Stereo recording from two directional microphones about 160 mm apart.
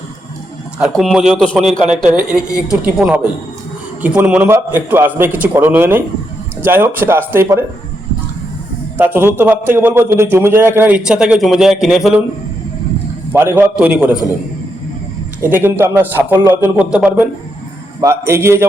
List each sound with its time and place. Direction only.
0.8 s a man's voice: centre (ahead or behind); by 7.6 s 15° right (ahead or behind)
9.0 s a man's voice: 15° right (ahead or behind)
13.3 s a man's voice: 15° right (ahead or behind)
15.4 s a man's voice: 15° right (ahead or behind)